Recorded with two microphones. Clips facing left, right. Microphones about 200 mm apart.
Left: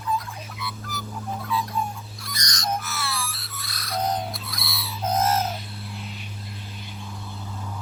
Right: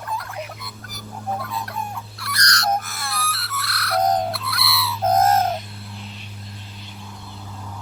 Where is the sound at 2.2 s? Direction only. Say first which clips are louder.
Right 8 dB; 70° right (ahead or behind).